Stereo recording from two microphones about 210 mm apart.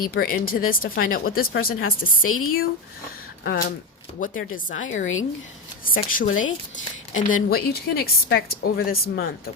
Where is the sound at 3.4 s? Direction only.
50° left (ahead or behind).